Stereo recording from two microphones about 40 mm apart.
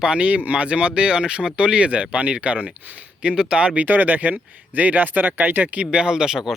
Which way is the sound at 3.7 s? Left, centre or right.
Right.